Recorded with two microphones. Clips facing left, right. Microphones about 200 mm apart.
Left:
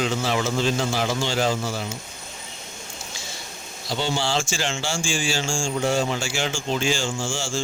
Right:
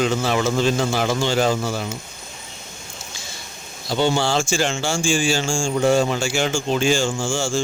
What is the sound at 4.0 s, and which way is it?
Mantra, 55° right (ahead or behind).